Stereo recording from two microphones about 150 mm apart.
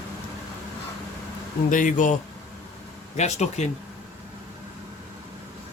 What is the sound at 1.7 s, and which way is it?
Speech, 60° left (ahead or behind).